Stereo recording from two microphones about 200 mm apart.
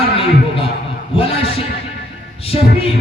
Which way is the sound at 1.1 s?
30° left (ahead or behind).